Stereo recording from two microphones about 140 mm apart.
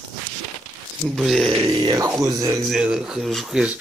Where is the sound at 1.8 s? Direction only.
25° right (ahead or behind).